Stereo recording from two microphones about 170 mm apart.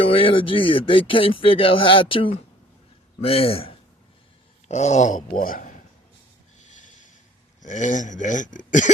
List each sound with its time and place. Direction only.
0.0 s a man's voice: 30° left (ahead or behind); by 5.8 s 50° left (ahead or behind)
7.6 s speech: 45° left (ahead or behind)